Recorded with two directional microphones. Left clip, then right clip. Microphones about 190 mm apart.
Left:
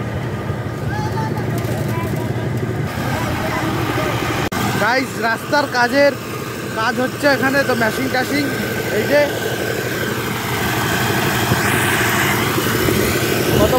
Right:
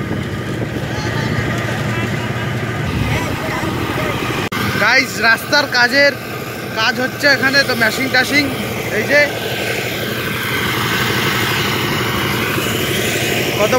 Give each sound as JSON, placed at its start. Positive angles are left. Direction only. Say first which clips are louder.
{"t": 4.7, "sound": "speech", "louder": "right 6 dB", "side_deg": 15}
{"t": 10.9, "sound": "vehicle", "louder": "right 2 dB", "side_deg": 5}